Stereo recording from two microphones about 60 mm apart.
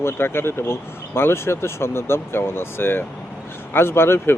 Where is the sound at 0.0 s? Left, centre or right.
Left.